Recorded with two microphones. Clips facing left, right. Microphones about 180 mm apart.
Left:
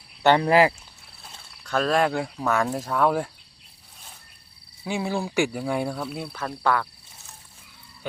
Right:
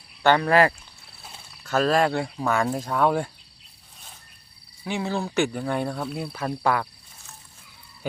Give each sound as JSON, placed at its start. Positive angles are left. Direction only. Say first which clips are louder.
{"t": 0.2, "sound": "speech", "louder": "left 1 dB", "side_deg": 20}
{"t": 1.2, "sound": "speech", "louder": "right 2 dB", "side_deg": -5}
{"t": 4.8, "sound": "speech", "louder": "even", "side_deg": 15}
{"t": 6.3, "sound": "speech", "louder": "even", "side_deg": -15}